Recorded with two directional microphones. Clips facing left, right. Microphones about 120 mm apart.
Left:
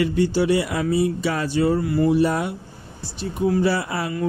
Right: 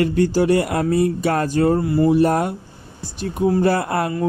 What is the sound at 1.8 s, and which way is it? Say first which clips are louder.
Speech: right 3 dB; 30° right (ahead or behind).